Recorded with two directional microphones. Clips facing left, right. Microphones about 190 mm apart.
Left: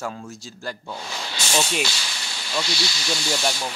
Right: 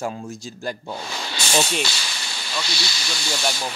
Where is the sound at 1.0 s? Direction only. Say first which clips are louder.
Right 2 dB; 65° right (ahead or behind).